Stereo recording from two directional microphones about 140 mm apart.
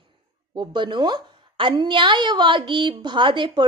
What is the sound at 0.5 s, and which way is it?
Speech, 35° right (ahead or behind).